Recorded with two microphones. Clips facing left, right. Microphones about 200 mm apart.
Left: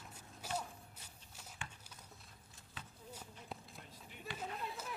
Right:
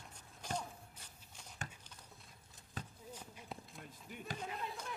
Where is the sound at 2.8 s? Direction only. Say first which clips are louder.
Right 7 dB; 40° right (ahead or behind).